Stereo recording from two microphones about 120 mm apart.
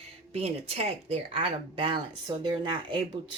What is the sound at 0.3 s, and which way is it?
Speech, 60° right (ahead or behind).